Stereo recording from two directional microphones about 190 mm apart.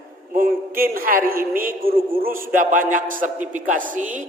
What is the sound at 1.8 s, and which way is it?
Speech, 30° right (ahead or behind).